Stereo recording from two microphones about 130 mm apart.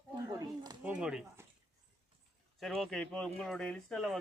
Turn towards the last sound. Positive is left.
turn(degrees=0)  # may be behind; listen again after turning